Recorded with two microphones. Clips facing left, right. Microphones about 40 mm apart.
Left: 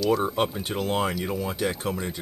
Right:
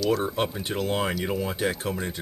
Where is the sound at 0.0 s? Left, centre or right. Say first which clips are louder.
Left 1 dB; centre.